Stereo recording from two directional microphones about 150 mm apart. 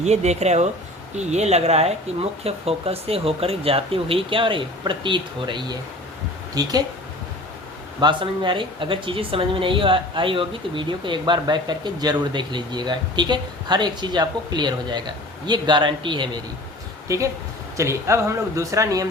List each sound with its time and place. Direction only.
0.0 s speech: 50° right (ahead or behind); by 6.8 s 25° right (ahead or behind)
8.0 s speech: 30° right (ahead or behind)